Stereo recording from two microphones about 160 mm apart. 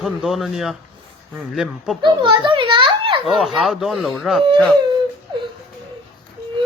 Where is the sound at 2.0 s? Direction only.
30° right (ahead or behind).